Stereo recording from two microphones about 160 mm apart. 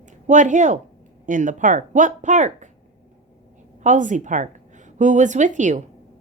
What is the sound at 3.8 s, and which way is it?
Speech, 50° right (ahead or behind).